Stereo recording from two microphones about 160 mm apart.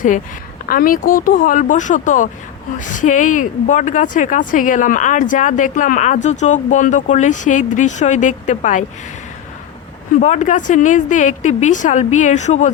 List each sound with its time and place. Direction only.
0.7 s speech: 65° left (ahead or behind)
10.2 s speech: 50° left (ahead or behind)